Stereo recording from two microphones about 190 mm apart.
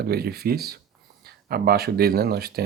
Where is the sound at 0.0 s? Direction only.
55° right (ahead or behind).